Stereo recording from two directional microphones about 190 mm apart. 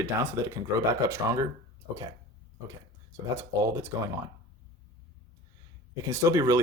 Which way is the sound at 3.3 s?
15° right (ahead or behind).